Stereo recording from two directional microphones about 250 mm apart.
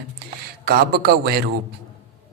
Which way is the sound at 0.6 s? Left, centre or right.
Right.